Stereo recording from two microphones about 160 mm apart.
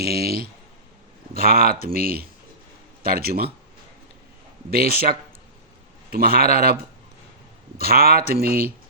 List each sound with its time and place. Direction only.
0.0 s speech: 75° right (ahead or behind)
4.7 s speech: 70° right (ahead or behind)
7.8 s speech: 70° right (ahead or behind)